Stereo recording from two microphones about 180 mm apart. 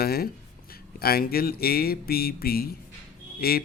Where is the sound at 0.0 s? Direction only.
60° left (ahead or behind).